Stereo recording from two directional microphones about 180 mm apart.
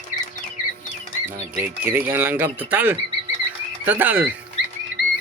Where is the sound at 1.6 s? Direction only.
10° right (ahead or behind).